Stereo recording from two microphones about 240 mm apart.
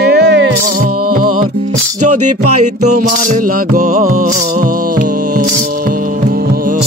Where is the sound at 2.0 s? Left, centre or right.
Right.